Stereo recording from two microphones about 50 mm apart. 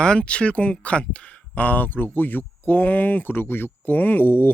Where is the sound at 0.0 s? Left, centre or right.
Centre; by 4.5 s left.